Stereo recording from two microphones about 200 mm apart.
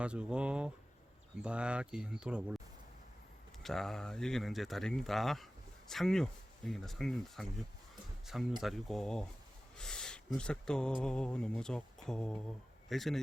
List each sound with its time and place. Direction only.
0.0 s speech: 5° right (ahead or behind)
3.6 s speech: centre (ahead or behind)